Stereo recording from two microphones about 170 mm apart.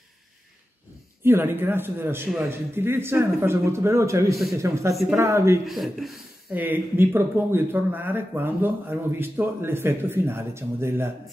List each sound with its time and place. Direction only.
1.2 s speech: 15° right (ahead or behind)
2.2 s speech: centre (ahead or behind)
2.7 s speech: 15° right (ahead or behind)
5.7 s speech: centre (ahead or behind)